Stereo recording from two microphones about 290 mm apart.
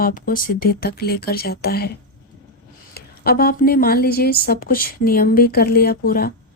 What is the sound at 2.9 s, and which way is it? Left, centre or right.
A woman's voice, left.